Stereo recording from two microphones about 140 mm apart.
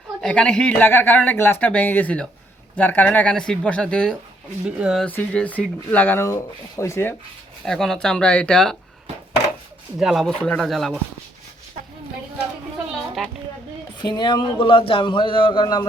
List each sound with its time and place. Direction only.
0.2 s speech: 5° left (ahead or behind)
4.8 s speech: 5° right (ahead or behind)
5.0 s speech: 10° left (ahead or behind)
7.6 s speech: 5° left (ahead or behind)
10.0 s speech: centre (ahead or behind)
14.0 s a man's voice: 30° left (ahead or behind)